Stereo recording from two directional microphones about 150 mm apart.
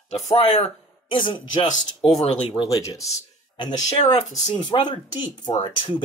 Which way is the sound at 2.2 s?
45° left (ahead or behind).